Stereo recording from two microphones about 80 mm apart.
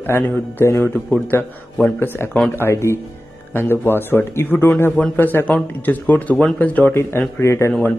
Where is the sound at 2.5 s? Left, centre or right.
Left.